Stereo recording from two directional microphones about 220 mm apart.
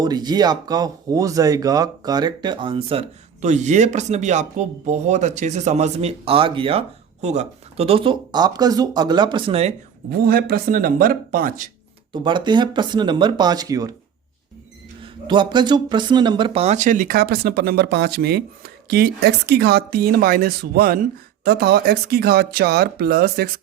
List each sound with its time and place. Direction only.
0.0 s speech: 20° right (ahead or behind)
10.1 s speech: 45° right (ahead or behind)
12.1 s speech: 20° right (ahead or behind)
15.0 s speech: 20° right (ahead or behind); by 23.5 s 45° right (ahead or behind)